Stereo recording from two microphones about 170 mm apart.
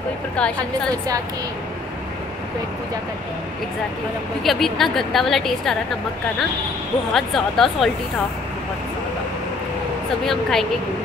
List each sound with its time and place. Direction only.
0.6 s a woman's voice: 20° right (ahead or behind)
4.4 s a woman's voice: centre (ahead or behind)
7.2 s a woman's voice: centre (ahead or behind)
10.2 s a woman's voice: centre (ahead or behind)